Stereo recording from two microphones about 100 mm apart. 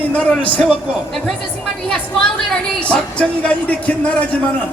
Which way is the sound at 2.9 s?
10° left (ahead or behind).